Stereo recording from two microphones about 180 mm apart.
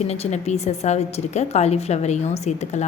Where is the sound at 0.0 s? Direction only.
35° left (ahead or behind).